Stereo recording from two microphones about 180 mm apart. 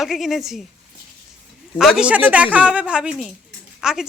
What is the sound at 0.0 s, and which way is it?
Speech, centre (ahead or behind).